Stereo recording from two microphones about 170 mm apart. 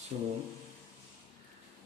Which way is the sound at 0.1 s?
40° right (ahead or behind).